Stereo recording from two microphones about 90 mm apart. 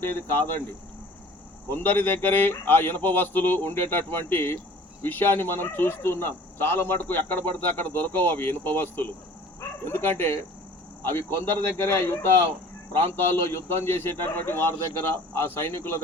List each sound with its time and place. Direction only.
0.0 s speech: 25° left (ahead or behind)
1.7 s speech: 20° left (ahead or behind)